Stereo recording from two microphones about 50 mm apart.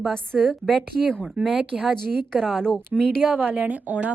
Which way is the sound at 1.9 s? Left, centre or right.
Centre.